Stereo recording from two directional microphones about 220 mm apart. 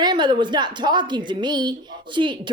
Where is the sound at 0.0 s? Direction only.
20° right (ahead or behind).